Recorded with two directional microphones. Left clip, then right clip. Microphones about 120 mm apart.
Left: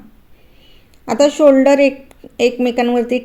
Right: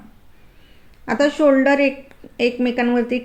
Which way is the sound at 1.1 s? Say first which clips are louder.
Left 5 dB; 30° left (ahead or behind).